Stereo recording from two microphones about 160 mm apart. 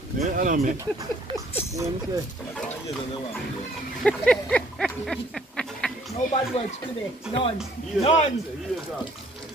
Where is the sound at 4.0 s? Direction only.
5° left (ahead or behind).